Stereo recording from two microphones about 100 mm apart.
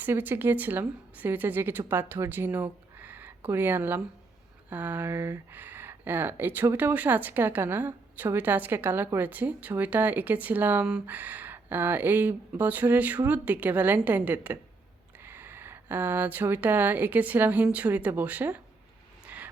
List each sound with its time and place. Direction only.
0.0 s speech: 20° right (ahead or behind)
5.1 s speech: 30° right (ahead or behind)
5.5 s speech: 20° right (ahead or behind)
19.2 s vehicle: 15° right (ahead or behind)